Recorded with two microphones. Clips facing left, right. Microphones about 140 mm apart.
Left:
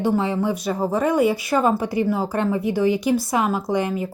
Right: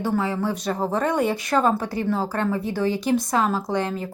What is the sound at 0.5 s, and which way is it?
Speech, 10° left (ahead or behind).